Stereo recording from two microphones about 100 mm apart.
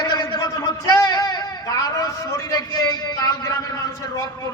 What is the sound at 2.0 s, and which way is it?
A man's voice, 35° left (ahead or behind).